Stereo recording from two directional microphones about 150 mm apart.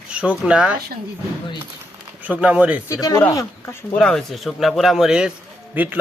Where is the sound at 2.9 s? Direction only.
25° left (ahead or behind).